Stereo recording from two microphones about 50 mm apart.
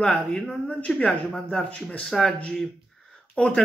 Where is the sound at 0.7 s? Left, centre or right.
Left.